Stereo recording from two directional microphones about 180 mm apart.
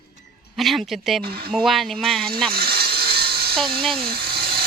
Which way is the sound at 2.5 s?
60° right (ahead or behind).